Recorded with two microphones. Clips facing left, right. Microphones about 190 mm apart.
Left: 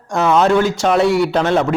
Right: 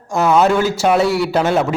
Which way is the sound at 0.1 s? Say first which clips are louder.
Even; 5° right (ahead or behind).